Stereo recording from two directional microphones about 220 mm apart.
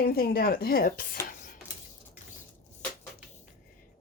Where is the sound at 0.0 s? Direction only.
45° left (ahead or behind).